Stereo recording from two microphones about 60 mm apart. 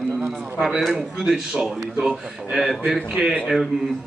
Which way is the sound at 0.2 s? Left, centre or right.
Centre.